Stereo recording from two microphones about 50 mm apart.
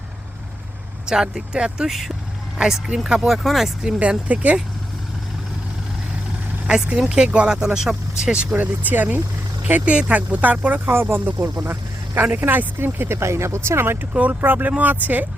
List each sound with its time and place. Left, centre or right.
1.0 s speech: centre
3.8 s speech: right
6.7 s speech: centre
8.5 s speech: right
9.8 s speech: right
14.1 s speech: right